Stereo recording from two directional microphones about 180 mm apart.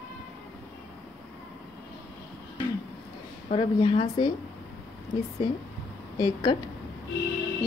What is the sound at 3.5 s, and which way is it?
Speech, 30° left (ahead or behind).